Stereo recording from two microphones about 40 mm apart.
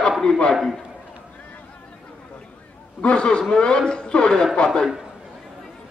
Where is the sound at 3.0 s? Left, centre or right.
Left.